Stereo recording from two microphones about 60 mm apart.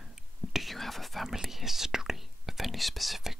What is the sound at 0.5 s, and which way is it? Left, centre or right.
Whispering, centre.